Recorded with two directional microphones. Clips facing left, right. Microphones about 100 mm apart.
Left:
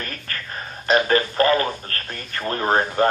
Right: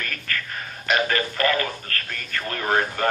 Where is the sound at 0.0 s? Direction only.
30° left (ahead or behind).